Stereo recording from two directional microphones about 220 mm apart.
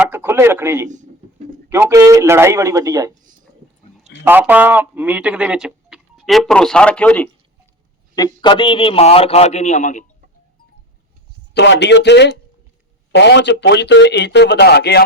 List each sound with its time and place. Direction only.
0.0 s speech: 10° right (ahead or behind)
4.2 s speech: 10° right (ahead or behind)
8.4 s a man's voice: 20° left (ahead or behind)
11.5 s speech: 50° left (ahead or behind)